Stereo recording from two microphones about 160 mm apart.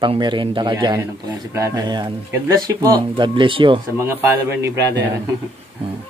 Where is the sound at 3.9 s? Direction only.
15° right (ahead or behind).